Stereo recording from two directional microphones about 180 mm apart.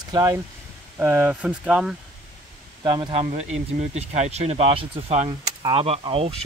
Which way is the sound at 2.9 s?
25° right (ahead or behind).